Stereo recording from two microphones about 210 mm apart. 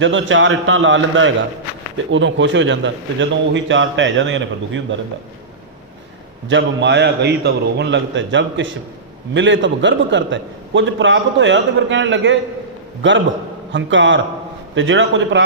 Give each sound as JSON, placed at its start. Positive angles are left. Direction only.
{"t": 0.0, "sound": "a man's voice", "side_deg": -65}
{"t": 6.5, "sound": "a man's voice", "side_deg": -60}